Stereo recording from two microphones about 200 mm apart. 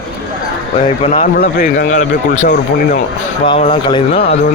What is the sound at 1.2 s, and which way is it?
A man's voice, 40° left (ahead or behind).